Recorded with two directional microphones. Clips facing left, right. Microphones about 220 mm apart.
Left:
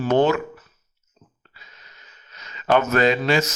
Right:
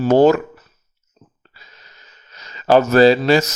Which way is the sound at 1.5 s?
35° right (ahead or behind).